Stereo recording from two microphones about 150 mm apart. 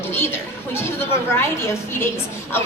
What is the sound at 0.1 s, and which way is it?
Chatter, 15° left (ahead or behind).